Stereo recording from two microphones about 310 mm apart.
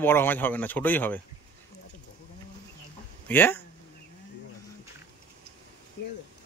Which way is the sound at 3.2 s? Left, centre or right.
Centre.